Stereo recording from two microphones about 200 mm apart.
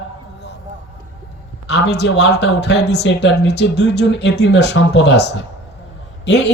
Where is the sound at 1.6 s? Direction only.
55° left (ahead or behind).